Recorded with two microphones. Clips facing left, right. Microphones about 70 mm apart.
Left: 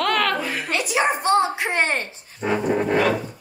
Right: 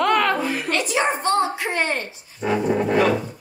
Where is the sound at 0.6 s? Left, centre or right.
Centre.